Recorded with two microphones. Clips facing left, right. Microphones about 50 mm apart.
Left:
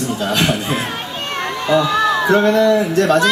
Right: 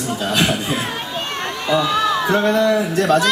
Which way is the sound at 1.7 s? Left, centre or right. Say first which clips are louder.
Left 2 dB; centre.